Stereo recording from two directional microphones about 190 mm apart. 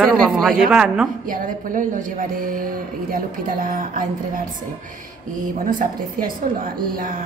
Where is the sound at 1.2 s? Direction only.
45° right (ahead or behind).